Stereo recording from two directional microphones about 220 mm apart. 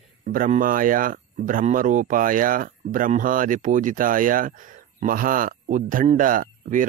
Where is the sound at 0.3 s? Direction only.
40° right (ahead or behind).